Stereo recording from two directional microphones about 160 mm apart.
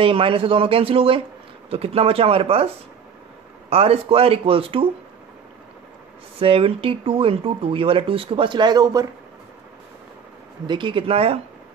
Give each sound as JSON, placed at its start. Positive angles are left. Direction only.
{"t": 0.0, "sound": "speech", "side_deg": -35}
{"t": 3.7, "sound": "speech", "side_deg": -35}
{"t": 6.4, "sound": "speech", "side_deg": -35}
{"t": 10.7, "sound": "speech", "side_deg": -30}